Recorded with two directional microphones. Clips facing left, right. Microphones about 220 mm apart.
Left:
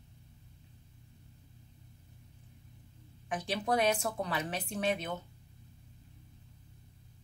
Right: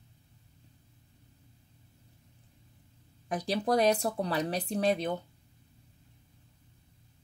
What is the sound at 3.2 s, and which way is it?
Speech, 35° right (ahead or behind).